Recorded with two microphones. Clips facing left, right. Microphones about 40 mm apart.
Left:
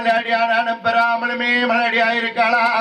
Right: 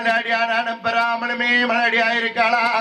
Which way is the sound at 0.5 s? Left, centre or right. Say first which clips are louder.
Left 3 dB; centre.